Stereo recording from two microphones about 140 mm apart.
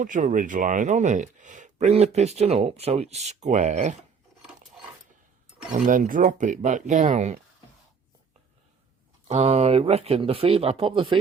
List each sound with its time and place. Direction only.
0.0 s speech: 70° right (ahead or behind)
5.7 s speech: 70° right (ahead or behind)
9.2 s speech: 55° right (ahead or behind); by 11.2 s 40° right (ahead or behind)